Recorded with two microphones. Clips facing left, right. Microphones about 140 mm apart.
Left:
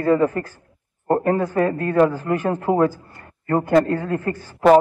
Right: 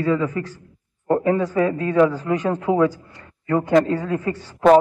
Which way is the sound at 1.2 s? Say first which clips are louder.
Right 1 dB; 55° left (ahead or behind).